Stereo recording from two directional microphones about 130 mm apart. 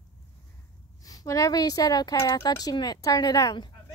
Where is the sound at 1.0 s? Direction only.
25° left (ahead or behind).